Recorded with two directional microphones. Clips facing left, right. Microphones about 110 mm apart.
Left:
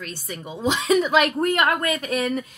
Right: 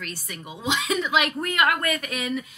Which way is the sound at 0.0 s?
25° left (ahead or behind).